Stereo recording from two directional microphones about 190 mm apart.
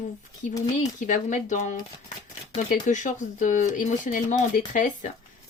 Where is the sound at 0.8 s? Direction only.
45° left (ahead or behind).